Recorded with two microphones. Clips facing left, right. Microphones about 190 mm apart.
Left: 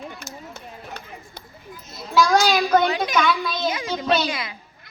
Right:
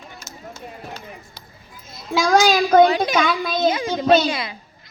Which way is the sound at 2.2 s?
50° right (ahead or behind).